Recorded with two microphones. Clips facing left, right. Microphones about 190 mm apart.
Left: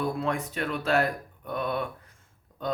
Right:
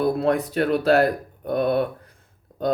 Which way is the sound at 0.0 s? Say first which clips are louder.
Right 8 dB; 40° right (ahead or behind).